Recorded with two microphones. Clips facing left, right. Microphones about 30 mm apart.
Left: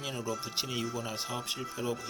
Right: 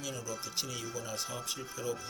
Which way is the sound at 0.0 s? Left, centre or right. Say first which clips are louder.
Left 4 dB; left.